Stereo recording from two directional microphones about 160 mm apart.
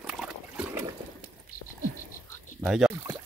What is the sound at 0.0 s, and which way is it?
Trickle, 5° right (ahead or behind).